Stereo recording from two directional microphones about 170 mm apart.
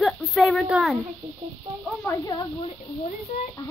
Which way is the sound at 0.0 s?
Centre (ahead or behind).